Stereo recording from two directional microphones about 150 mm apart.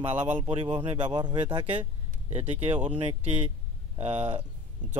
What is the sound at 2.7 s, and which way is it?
Speech, 10° right (ahead or behind).